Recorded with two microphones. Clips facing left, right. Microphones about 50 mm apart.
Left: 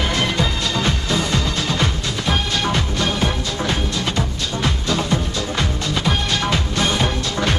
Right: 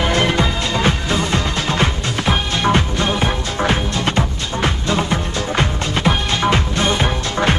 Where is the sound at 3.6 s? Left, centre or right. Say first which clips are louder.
Right 5 dB; right.